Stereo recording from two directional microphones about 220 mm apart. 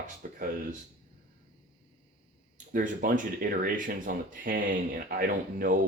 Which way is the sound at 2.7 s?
35° right (ahead or behind).